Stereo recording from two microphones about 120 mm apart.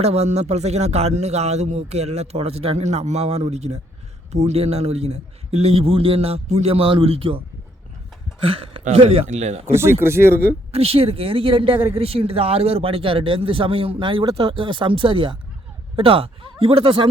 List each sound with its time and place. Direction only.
0.0 s speech: 60° right (ahead or behind)
8.8 s speech: 60° right (ahead or behind)
9.6 s speech: 20° right (ahead or behind)
10.7 s speech: 55° right (ahead or behind)